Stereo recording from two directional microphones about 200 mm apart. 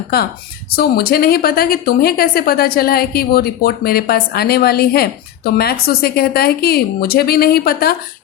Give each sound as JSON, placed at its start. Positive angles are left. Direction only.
{"t": 0.8, "sound": "speech", "side_deg": 50}